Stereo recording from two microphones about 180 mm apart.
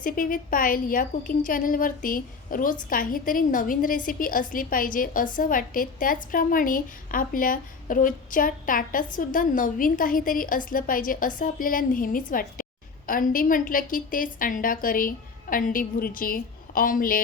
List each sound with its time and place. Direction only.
0.0 s a woman's voice: 50° left (ahead or behind)